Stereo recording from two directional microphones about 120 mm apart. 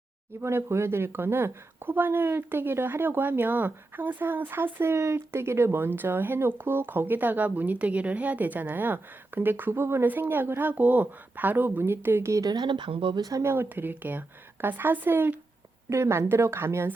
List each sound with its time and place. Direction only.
0.4 s speech: 20° right (ahead or behind); by 13.2 s 45° right (ahead or behind)
13.2 s speech: 25° right (ahead or behind)